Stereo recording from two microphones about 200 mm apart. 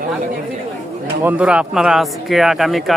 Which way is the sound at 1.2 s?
5° right (ahead or behind).